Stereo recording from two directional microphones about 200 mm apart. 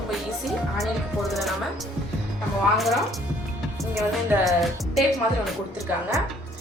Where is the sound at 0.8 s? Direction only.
Centre (ahead or behind).